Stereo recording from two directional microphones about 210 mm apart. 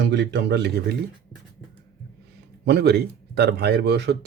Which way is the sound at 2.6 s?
50° right (ahead or behind).